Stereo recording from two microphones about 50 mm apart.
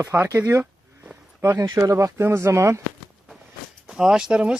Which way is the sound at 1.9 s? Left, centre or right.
Right.